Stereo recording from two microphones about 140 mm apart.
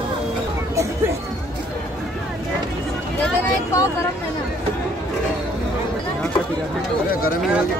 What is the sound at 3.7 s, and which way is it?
Vehicle, 20° left (ahead or behind).